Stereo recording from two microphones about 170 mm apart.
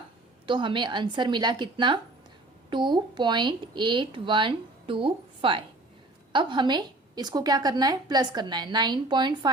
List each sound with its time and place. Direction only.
0.4 s a woman's voice: 30° right (ahead or behind)